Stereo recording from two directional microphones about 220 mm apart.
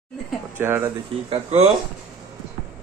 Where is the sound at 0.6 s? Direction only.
10° right (ahead or behind).